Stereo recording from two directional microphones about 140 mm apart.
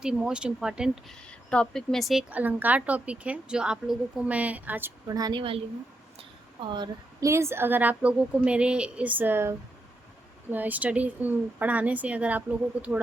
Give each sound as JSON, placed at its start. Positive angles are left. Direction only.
{"t": 0.0, "sound": "speech", "side_deg": -5}
{"t": 1.3, "sound": "speech", "side_deg": 5}
{"t": 2.3, "sound": "a woman's voice", "side_deg": -10}
{"t": 5.0, "sound": "a woman's voice", "side_deg": -25}